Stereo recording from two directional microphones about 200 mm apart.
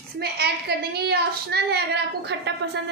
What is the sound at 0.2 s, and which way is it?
A woman's voice, 55° right (ahead or behind).